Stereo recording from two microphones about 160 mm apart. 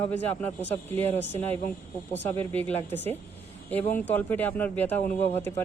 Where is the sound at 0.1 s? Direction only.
10° left (ahead or behind).